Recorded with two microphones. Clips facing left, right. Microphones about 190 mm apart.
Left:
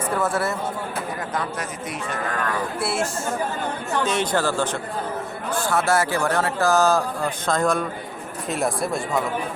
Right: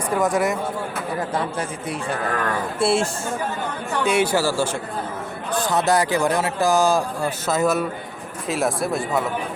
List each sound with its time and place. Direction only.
0.1 s speech: 15° right (ahead or behind)
2.7 s speech: 30° right (ahead or behind)
4.0 s speech: 10° right (ahead or behind)